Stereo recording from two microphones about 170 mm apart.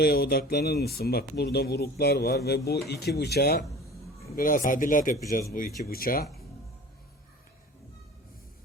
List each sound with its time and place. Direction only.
0.0 s speech: 65° left (ahead or behind)
4.4 s speech: 55° left (ahead or behind)